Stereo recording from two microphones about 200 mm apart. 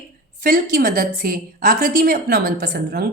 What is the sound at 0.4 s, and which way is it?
A woman's voice, 45° right (ahead or behind).